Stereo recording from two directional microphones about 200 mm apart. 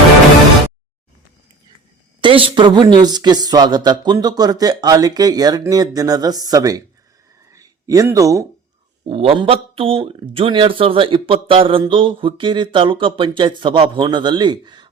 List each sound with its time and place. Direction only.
2.2 s speech: 25° right (ahead or behind)
9.0 s speech: 30° right (ahead or behind)